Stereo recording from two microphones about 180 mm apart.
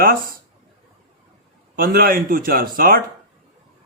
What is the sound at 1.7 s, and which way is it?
Speech, 55° right (ahead or behind).